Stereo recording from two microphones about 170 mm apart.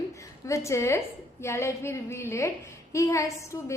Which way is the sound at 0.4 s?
15° left (ahead or behind).